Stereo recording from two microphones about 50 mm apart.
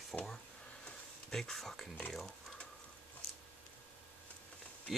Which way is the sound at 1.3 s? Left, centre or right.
Centre.